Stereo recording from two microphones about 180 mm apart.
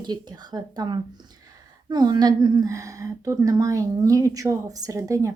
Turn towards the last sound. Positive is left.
turn(degrees=-15)  # may be behind; listen again after turning